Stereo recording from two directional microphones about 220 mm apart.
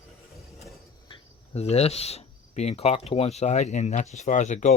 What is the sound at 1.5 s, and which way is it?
Speech, 30° left (ahead or behind).